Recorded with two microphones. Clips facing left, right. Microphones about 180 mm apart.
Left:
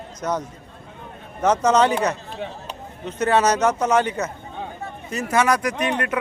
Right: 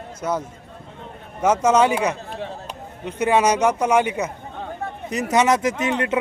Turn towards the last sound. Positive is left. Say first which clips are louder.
# right 2 dB
turn(degrees=-20)  # may be behind; listen again after turning